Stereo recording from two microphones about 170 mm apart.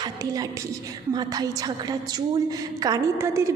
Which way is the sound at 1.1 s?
25° right (ahead or behind).